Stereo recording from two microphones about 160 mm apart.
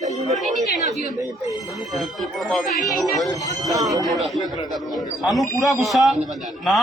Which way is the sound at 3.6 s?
20° right (ahead or behind).